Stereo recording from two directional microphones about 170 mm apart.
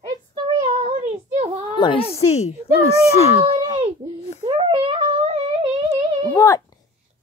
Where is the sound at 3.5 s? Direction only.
25° right (ahead or behind).